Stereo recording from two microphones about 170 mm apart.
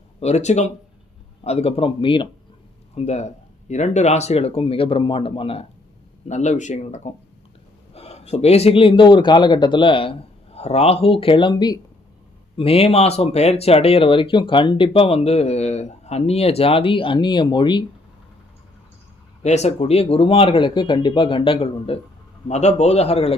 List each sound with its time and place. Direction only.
0.2 s speech: 40° left (ahead or behind)
6.2 s speech: 45° left (ahead or behind); by 17.8 s 25° left (ahead or behind)
19.4 s speech: 40° left (ahead or behind)